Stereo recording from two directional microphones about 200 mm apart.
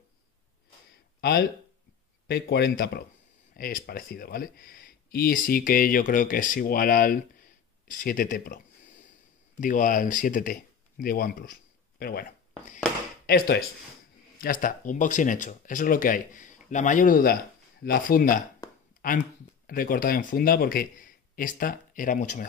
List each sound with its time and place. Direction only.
1.2 s speech: 50° left (ahead or behind)
14.4 s speech: 40° left (ahead or behind)
18.6 s a sound: 15° left (ahead or behind)
18.9 s speech: 45° left (ahead or behind)